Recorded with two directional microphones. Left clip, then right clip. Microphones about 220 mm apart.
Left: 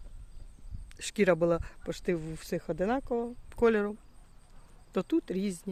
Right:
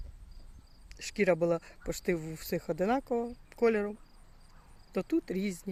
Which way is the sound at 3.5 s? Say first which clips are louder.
Left 2 dB; 15° left (ahead or behind).